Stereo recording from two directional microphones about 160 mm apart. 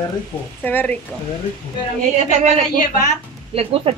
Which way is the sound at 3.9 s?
40° right (ahead or behind).